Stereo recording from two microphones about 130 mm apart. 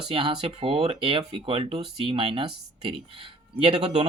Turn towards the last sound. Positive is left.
turn(degrees=-55)  # may be behind; listen again after turning